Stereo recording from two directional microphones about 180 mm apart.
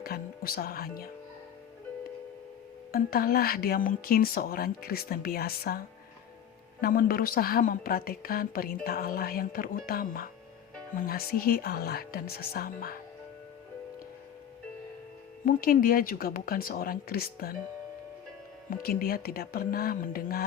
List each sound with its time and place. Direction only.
0.0 s speech: 55° left (ahead or behind)
2.9 s a woman's voice: 55° left (ahead or behind)
6.8 s a woman's voice: 55° left (ahead or behind)
15.4 s speech: 50° left (ahead or behind)
18.7 s a woman's voice: 55° left (ahead or behind)